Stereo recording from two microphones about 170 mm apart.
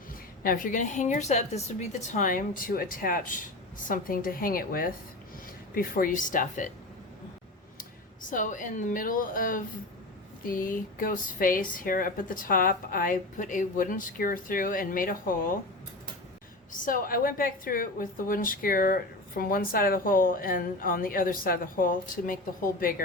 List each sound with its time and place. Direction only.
0.4 s a woman's voice: 55° left (ahead or behind)
8.3 s a woman's voice: 50° left (ahead or behind)
16.8 s a woman's voice: 55° left (ahead or behind)